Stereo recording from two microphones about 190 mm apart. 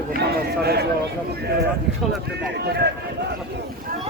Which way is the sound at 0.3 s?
55° right (ahead or behind).